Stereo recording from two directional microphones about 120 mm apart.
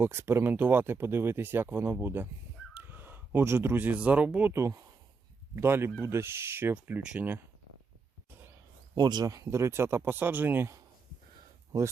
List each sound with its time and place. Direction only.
0.0 s speech: 20° right (ahead or behind)
9.0 s speech: 35° right (ahead or behind); by 10.8 s 20° right (ahead or behind)